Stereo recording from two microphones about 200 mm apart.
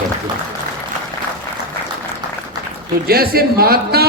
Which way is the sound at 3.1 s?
50° right (ahead or behind).